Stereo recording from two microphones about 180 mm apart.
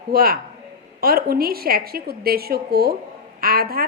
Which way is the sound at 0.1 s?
55° right (ahead or behind).